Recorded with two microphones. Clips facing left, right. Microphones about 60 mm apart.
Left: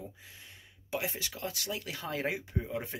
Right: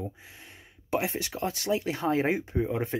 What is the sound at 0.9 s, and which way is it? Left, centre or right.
Speech, right.